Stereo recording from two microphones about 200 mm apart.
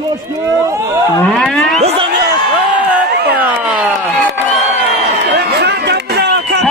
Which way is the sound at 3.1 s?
55° right (ahead or behind).